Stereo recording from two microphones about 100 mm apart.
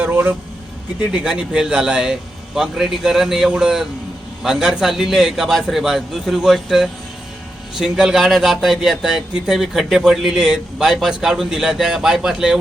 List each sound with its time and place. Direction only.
0.0 s vehicle: 15° right (ahead or behind)
1.1 s a man's voice: 10° right (ahead or behind)